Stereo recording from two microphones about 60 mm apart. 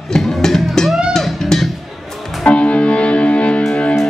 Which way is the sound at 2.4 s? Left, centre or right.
Left.